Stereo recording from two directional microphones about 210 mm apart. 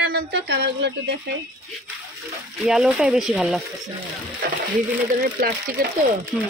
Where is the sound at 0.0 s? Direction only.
50° right (ahead or behind).